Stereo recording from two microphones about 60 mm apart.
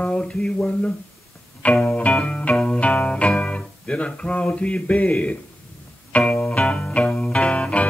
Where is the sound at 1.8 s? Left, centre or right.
Left.